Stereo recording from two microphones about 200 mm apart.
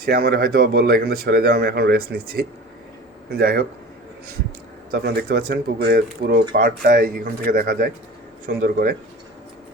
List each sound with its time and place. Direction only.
0.0 s speech: 50° right (ahead or behind)
4.9 s speech: 50° right (ahead or behind)